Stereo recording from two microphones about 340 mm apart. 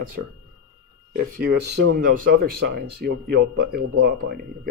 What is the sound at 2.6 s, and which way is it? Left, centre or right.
Speech, right.